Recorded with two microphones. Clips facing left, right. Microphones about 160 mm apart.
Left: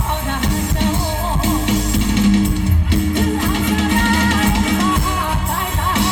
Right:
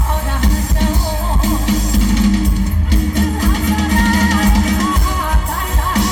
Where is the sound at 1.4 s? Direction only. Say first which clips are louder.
Even; 40° right (ahead or behind).